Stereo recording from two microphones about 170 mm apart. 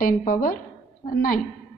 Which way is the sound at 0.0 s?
55° left (ahead or behind).